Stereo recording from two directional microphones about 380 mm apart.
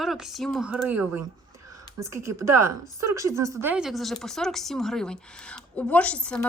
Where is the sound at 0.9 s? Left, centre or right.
Right.